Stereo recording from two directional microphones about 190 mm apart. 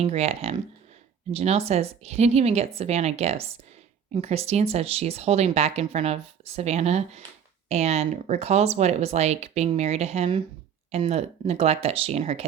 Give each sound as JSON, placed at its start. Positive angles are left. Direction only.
{"t": 0.0, "sound": "speech", "side_deg": -35}